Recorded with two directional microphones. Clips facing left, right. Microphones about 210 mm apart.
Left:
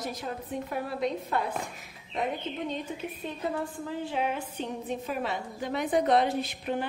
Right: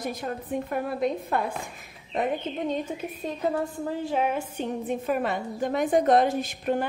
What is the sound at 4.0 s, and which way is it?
A woman's voice, 45° right (ahead or behind).